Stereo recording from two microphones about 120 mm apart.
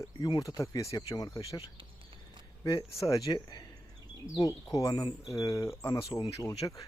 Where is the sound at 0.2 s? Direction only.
35° left (ahead or behind).